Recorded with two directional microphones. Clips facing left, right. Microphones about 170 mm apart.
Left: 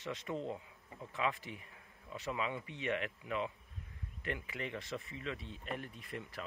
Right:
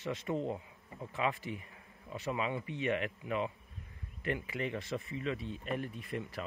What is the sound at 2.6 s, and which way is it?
Speech, 10° right (ahead or behind).